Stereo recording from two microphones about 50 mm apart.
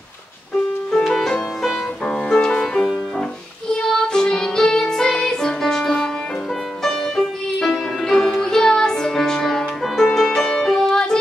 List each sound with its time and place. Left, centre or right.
1.0 s music: centre
2.0 s music: centre
2.6 s music: centre